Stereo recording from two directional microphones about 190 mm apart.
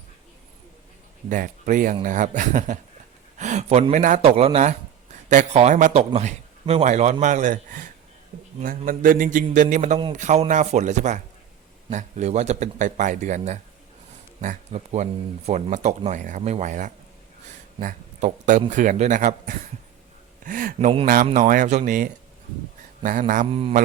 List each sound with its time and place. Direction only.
1.3 s speech: 45° right (ahead or behind)
8.9 s speech: 45° right (ahead or behind)
20.7 s speech: 30° right (ahead or behind)
21.3 s speech: 45° right (ahead or behind)
23.5 s a man's voice: 30° right (ahead or behind)